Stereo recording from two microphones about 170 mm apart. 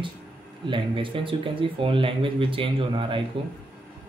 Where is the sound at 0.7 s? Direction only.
30° right (ahead or behind).